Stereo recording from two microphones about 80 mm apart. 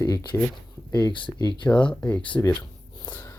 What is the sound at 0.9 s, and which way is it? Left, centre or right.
Speech, left.